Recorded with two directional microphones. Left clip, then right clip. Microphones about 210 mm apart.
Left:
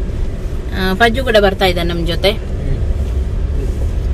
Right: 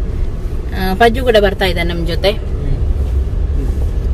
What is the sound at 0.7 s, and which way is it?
Speech, 20° left (ahead or behind).